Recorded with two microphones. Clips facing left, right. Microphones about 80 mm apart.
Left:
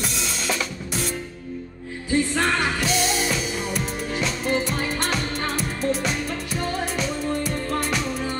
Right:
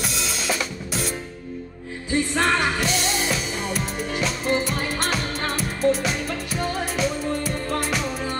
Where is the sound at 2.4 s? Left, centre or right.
Centre.